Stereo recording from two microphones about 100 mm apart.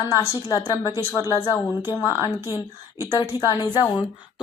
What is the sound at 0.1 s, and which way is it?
A woman's voice, 35° left (ahead or behind).